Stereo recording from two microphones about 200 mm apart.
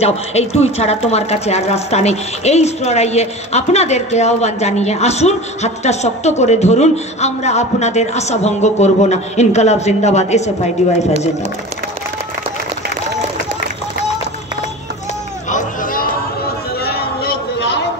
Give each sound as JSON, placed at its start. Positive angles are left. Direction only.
{"t": 0.0, "sound": "speech", "side_deg": 30}
{"t": 15.5, "sound": "hubbub", "side_deg": 45}
{"t": 16.8, "sound": "a sound", "side_deg": 50}